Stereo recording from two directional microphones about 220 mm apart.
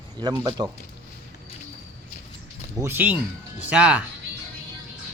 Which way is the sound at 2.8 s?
10° right (ahead or behind).